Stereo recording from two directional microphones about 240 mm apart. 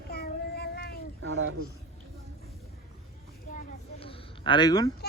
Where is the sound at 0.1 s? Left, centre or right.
Left.